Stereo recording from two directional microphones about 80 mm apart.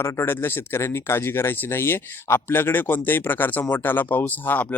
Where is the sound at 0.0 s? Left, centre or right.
Left.